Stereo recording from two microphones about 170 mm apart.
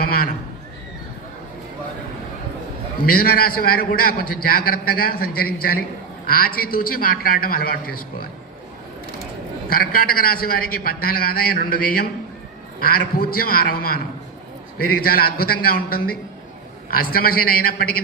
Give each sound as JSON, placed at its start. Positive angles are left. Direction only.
{"t": 0.0, "sound": "neigh", "side_deg": 60}
{"t": 3.1, "sound": "a man's voice", "side_deg": 60}
{"t": 9.6, "sound": "a man's voice", "side_deg": 60}